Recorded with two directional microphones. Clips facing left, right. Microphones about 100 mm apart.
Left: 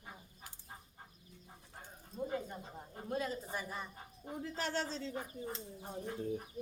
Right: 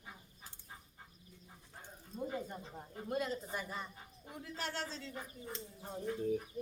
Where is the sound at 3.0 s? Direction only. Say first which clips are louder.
Right 1 dB; centre (ahead or behind).